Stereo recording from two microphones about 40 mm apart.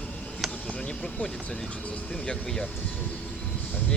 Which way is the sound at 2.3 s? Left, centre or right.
Left.